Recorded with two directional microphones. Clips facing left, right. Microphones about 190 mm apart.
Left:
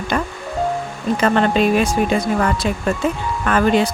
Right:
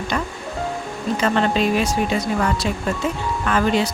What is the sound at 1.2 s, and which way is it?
Speech, 55° left (ahead or behind).